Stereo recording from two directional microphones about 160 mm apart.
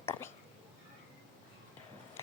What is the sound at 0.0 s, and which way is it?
Whispering, 15° left (ahead or behind).